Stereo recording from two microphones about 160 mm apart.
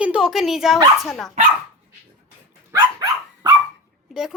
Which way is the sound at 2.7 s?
25° right (ahead or behind).